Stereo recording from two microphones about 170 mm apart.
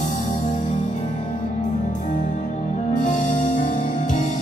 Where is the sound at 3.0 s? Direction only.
50° left (ahead or behind).